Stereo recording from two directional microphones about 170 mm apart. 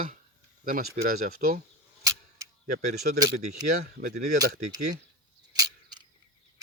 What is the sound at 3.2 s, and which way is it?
Speech, 20° right (ahead or behind).